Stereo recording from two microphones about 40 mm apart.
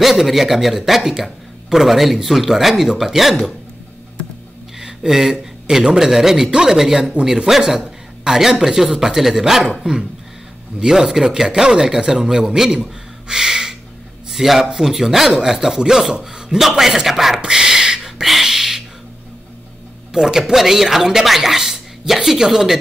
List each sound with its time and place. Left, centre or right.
0.0 s a woman's voice: centre
4.7 s a man's voice: centre
10.8 s a woman's voice: centre
17.4 s a sound: centre
18.2 s a sound: centre
20.1 s music: centre
20.5 s a woman's voice: centre